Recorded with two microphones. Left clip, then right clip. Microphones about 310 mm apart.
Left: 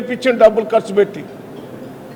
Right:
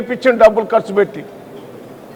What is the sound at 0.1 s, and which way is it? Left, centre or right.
A man's voice, right.